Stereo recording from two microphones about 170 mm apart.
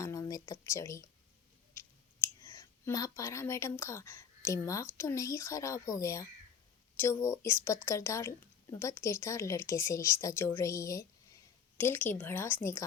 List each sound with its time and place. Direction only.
0.0 s a sound: 20° left (ahead or behind)
1.7 s clicking: 15° left (ahead or behind)
4.9 s a woman's voice: 15° left (ahead or behind)